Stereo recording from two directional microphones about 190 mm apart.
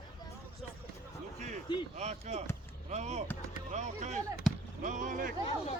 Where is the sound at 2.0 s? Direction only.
35° right (ahead or behind).